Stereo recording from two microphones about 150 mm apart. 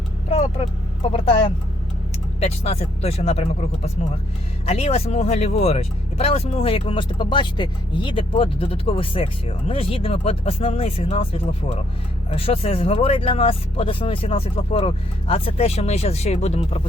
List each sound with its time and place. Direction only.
0.3 s speech: 45° left (ahead or behind)